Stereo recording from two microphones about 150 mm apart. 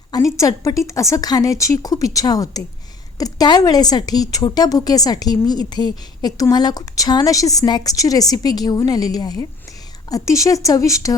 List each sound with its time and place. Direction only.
0.1 s a woman's voice: 20° left (ahead or behind)